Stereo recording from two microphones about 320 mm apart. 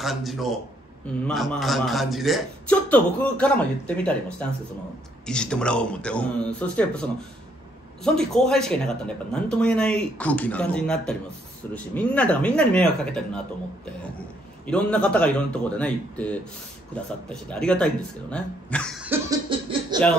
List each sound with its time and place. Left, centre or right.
0.0 s a man's voice: centre
14.7 s a man's voice: centre
19.5 s a sound: centre
19.9 s speech: centre